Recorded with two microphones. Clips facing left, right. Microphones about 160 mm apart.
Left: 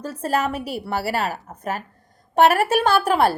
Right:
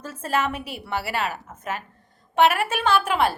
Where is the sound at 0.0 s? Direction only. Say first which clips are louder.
Left 3 dB; 35° left (ahead or behind).